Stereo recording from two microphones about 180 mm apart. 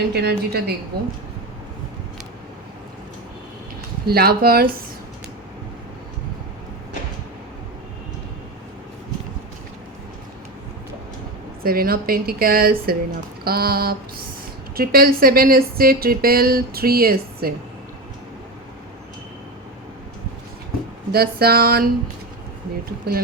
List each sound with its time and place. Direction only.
0.1 s speech: 65° right (ahead or behind)
4.0 s speech: 60° right (ahead or behind)
11.6 s speech: 55° right (ahead or behind)
21.1 s speech: 60° right (ahead or behind)
23.1 s speech: 60° right (ahead or behind)